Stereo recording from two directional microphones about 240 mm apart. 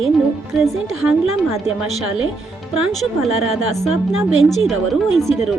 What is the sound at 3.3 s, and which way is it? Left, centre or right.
Speech, right.